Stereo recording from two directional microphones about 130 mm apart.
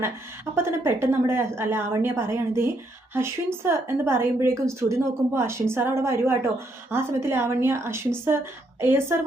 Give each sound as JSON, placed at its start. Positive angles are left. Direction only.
{"t": 0.5, "sound": "a woman's voice", "side_deg": -20}